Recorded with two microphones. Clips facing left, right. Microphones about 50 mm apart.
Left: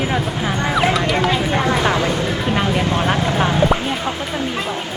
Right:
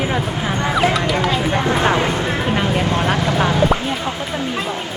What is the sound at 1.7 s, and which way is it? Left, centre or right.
Speech, right.